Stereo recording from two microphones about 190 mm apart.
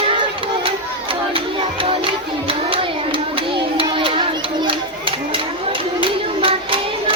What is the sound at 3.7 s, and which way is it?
Children playing, 25° right (ahead or behind).